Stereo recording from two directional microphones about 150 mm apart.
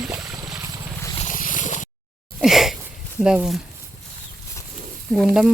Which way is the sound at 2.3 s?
Centre (ahead or behind).